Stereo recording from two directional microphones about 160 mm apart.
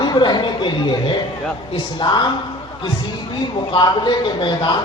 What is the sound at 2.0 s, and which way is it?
Speech, 25° left (ahead or behind).